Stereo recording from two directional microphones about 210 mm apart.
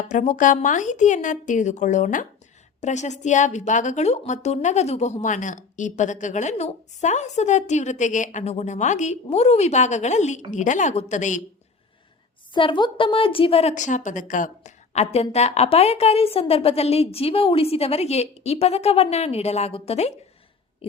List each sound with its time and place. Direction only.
0.0 s a woman's voice: 35° left (ahead or behind)
12.5 s a woman's voice: 25° left (ahead or behind)